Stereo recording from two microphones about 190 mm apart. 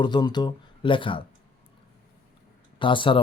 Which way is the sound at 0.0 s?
25° left (ahead or behind).